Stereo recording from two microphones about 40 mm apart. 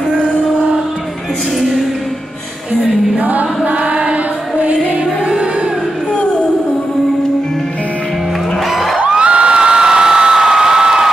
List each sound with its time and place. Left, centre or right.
3.2 s music: right
8.7 s music: centre
9.1 s crowd: right